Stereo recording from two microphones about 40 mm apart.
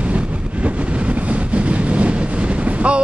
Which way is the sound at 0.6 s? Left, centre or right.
Right.